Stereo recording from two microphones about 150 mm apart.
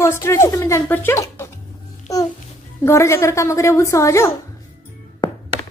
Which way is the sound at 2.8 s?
20° left (ahead or behind).